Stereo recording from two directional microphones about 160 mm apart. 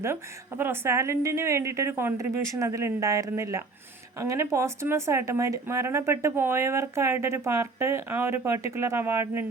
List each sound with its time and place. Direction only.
0.0 s speech: 15° right (ahead or behind)